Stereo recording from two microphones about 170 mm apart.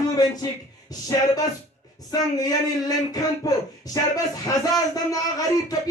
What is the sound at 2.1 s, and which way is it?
A man's voice, 20° left (ahead or behind).